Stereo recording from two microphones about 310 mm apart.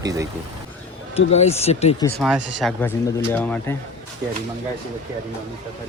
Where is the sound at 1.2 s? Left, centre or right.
Centre.